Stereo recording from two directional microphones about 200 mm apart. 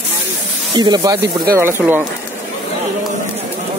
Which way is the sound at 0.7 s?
20° right (ahead or behind).